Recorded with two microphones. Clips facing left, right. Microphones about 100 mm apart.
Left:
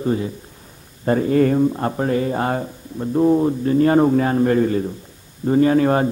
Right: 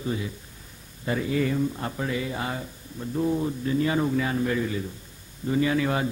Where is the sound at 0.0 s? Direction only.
40° left (ahead or behind).